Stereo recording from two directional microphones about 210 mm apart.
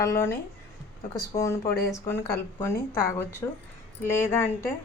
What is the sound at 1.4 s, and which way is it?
A woman's voice, 15° left (ahead or behind).